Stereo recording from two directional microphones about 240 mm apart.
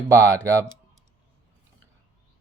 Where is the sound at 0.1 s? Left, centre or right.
Centre.